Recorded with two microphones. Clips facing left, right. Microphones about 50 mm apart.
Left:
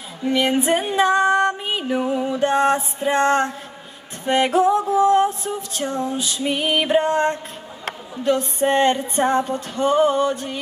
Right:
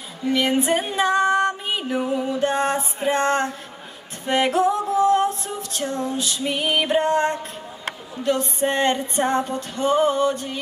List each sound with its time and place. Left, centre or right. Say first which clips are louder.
0.3 s female singing: left 1 dB; centre
5.0 s music: left 1 dB; centre
5.4 s female singing: left 2 dB; centre